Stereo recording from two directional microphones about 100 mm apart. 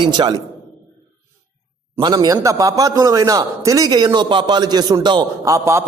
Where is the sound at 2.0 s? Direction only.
40° right (ahead or behind).